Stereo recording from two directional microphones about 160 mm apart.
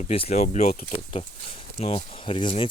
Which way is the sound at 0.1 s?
40° left (ahead or behind).